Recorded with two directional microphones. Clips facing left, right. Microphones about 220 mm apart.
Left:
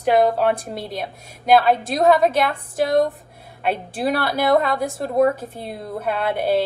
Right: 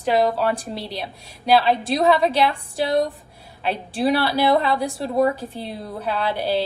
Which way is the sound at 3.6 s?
50° left (ahead or behind).